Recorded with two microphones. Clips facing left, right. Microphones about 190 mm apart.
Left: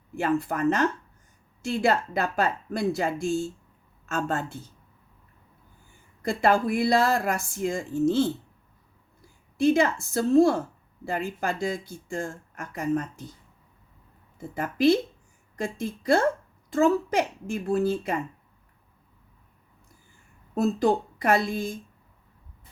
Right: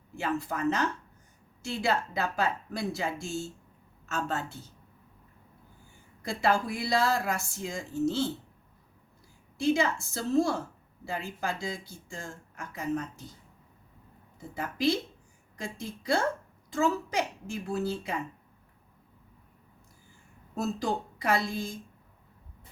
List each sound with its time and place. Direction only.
0.2 s speech: 55° left (ahead or behind)
6.2 s speech: 55° left (ahead or behind)
9.6 s a woman's voice: 55° left (ahead or behind)
14.3 s speech: 55° left (ahead or behind)
20.6 s speech: 55° left (ahead or behind)